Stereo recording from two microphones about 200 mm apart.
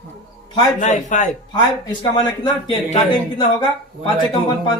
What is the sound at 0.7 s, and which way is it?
Speech, 40° left (ahead or behind).